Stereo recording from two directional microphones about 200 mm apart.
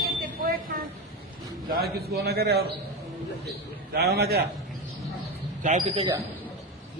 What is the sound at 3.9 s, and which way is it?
Speech, 55° right (ahead or behind).